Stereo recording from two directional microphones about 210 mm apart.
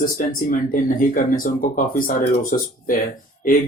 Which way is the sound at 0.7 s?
40° left (ahead or behind).